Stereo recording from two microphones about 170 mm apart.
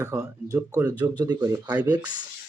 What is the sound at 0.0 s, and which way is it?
Speech, 20° right (ahead or behind).